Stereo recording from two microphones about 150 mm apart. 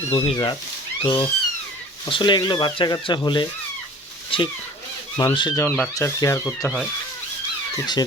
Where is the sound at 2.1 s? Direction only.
30° left (ahead or behind).